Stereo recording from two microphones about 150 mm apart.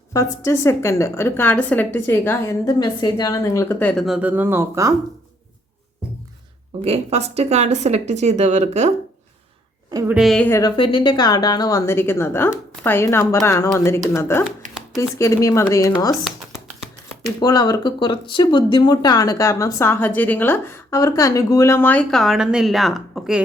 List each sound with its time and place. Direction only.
0.1 s a woman's voice: 20° left (ahead or behind)
2.6 s speech: 25° left (ahead or behind)
4.0 s speech: 5° right (ahead or behind)
6.8 s speech: 45° right (ahead or behind)
10.1 s a woman's voice: centre (ahead or behind)
10.4 s speech: 20° left (ahead or behind)
10.7 s a woman's voice: 35° left (ahead or behind)
17.4 s speech: 25° left (ahead or behind)
22.1 s a woman's voice: centre (ahead or behind)